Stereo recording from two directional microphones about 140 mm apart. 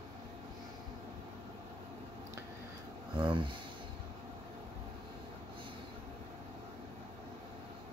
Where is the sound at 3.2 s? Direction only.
35° right (ahead or behind).